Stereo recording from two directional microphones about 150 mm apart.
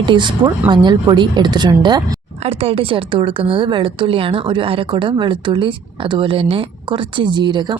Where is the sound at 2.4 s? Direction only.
40° right (ahead or behind).